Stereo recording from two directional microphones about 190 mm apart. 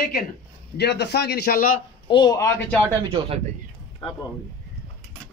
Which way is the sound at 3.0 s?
30° right (ahead or behind).